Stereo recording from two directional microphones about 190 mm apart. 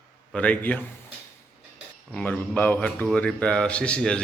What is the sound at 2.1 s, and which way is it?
A man's voice, 5° left (ahead or behind).